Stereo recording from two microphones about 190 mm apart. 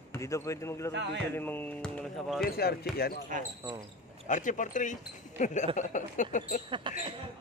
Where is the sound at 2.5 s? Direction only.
55° left (ahead or behind).